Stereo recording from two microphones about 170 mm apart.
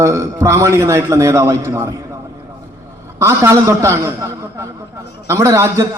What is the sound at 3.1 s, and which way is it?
A man's voice, 15° right (ahead or behind).